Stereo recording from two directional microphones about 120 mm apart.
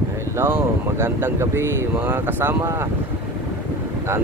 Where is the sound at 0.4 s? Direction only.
20° right (ahead or behind).